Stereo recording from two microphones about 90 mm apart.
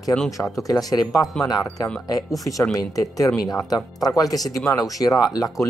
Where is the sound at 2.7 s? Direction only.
40° left (ahead or behind).